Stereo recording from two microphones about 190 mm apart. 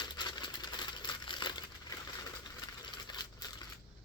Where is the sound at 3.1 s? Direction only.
20° left (ahead or behind).